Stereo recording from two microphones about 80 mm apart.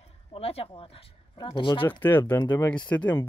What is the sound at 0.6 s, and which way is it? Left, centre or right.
Speech, left.